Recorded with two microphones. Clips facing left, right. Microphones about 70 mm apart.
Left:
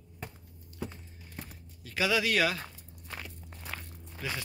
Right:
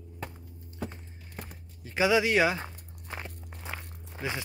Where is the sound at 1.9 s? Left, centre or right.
Right.